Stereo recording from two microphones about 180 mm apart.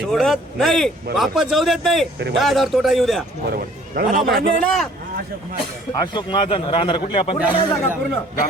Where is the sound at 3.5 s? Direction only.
55° right (ahead or behind).